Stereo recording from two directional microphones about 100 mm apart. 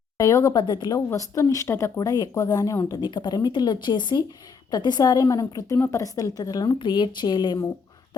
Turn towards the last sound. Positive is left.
turn(degrees=50)  # may be behind; listen again after turning